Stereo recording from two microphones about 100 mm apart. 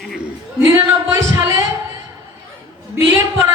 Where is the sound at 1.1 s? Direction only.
35° right (ahead or behind).